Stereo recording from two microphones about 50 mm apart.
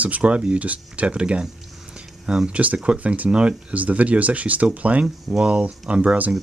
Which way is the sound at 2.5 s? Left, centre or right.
Right.